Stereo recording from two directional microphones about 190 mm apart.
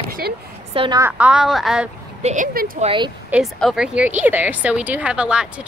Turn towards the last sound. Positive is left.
turn(degrees=-5)  # may be behind; listen again after turning